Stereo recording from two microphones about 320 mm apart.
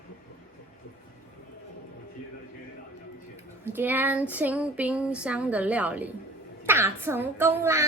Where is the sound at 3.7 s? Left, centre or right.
Centre.